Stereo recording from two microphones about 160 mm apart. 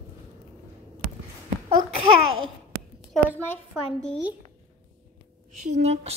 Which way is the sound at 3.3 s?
15° left (ahead or behind).